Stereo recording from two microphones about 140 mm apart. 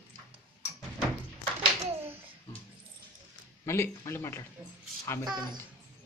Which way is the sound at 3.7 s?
20° left (ahead or behind).